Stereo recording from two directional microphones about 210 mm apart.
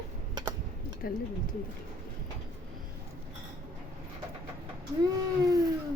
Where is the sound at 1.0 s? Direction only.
45° left (ahead or behind).